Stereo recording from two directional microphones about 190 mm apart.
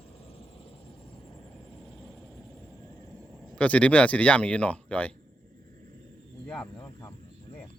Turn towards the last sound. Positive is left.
turn(degrees=15)  # may be behind; listen again after turning